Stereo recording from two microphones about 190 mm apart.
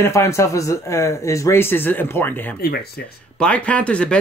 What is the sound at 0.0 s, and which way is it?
A man's voice, 15° left (ahead or behind).